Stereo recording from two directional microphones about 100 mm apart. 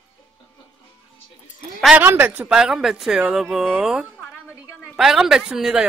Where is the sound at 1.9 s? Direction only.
20° right (ahead or behind).